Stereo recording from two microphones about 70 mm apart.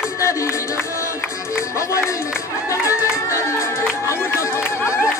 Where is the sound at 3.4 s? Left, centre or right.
Left.